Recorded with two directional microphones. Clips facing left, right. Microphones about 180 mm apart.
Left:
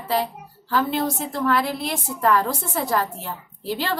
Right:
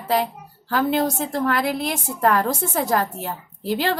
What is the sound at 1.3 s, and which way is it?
A woman's voice, 45° right (ahead or behind).